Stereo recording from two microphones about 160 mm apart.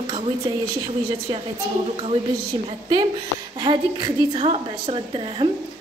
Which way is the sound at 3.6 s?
30° right (ahead or behind).